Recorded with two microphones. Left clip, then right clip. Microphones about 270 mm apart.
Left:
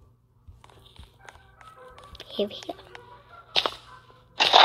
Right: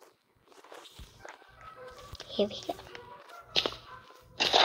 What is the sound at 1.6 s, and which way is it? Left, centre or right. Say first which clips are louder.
Walk: right 1 dB; left.